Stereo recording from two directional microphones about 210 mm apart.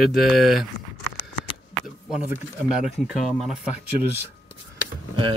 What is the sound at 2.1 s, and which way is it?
Speech, 5° right (ahead or behind).